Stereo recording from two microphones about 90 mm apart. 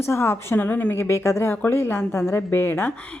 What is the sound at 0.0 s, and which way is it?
A woman's voice, 30° left (ahead or behind).